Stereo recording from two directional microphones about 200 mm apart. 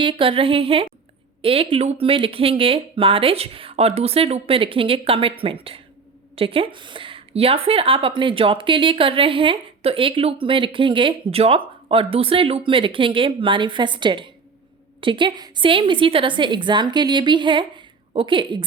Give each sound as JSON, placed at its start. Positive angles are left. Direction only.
{"t": 0.0, "sound": "a woman's voice", "side_deg": -25}